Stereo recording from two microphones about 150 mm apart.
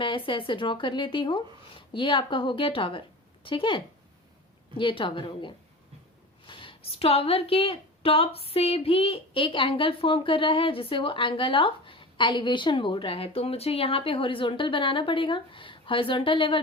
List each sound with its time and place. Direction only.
0.0 s a woman's voice: 35° left (ahead or behind)